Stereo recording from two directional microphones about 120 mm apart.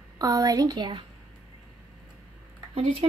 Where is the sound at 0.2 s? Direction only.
30° right (ahead or behind).